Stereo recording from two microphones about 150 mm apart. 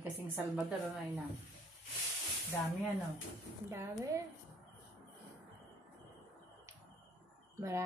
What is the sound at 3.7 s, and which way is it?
Speech, 20° right (ahead or behind).